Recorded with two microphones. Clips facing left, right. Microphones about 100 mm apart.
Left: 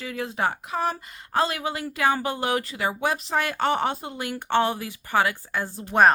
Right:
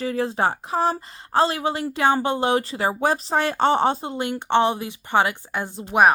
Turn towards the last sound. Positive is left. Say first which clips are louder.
# right 1 dB
turn(degrees=-15)  # may be behind; listen again after turning